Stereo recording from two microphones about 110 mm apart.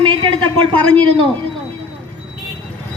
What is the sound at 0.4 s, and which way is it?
Speech, 55° right (ahead or behind).